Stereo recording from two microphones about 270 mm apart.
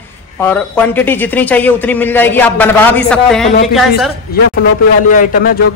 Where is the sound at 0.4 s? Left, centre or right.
Centre.